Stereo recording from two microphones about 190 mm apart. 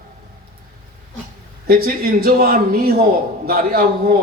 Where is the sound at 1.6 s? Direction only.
55° right (ahead or behind).